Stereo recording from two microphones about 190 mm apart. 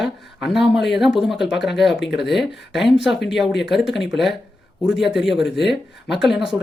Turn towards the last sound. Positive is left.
turn(degrees=0)  # may be behind; listen again after turning